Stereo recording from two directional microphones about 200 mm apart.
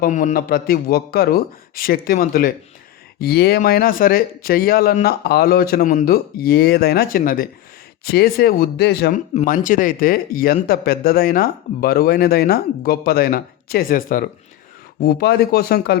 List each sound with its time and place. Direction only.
0.0 s speech: 40° left (ahead or behind)
9.3 s speech: 35° left (ahead or behind); by 16.0 s 50° left (ahead or behind)